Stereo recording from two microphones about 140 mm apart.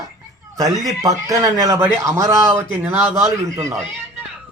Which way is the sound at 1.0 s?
25° right (ahead or behind).